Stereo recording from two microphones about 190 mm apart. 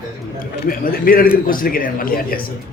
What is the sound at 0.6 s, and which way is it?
Speech, 50° left (ahead or behind).